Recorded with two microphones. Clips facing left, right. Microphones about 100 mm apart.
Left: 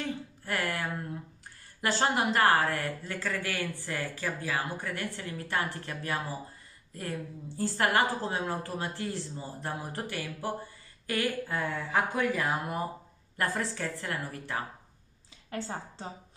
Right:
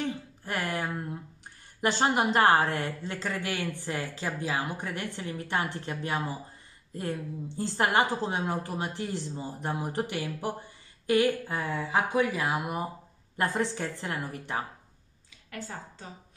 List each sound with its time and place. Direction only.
0.0 s a sound: 20° right (ahead or behind)
1.8 s a woman's voice: 20° right (ahead or behind)
15.5 s a woman's voice: 30° left (ahead or behind)